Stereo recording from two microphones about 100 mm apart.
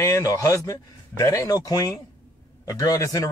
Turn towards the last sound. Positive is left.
turn(degrees=35)  # may be behind; listen again after turning